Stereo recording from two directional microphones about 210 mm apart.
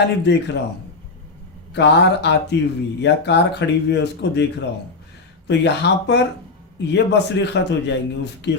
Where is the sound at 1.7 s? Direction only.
55° left (ahead or behind).